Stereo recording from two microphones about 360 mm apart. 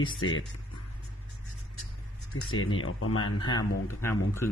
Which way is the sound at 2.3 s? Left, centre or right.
Left.